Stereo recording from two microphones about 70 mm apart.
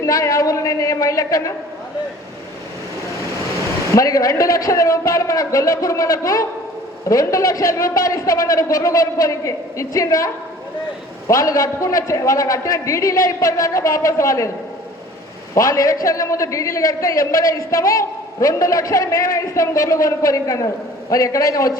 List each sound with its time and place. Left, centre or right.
0.0 s a man's voice: left
3.9 s a man's voice: left
15.5 s a man's voice: left